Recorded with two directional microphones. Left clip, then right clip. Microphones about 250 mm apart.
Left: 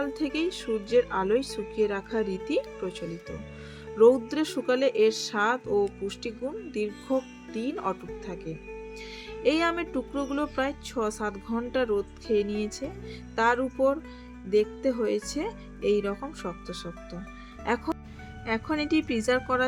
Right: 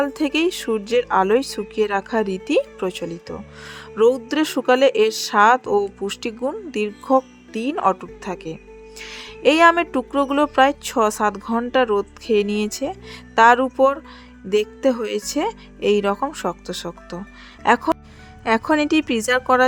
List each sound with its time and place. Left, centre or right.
0.0 s speech: right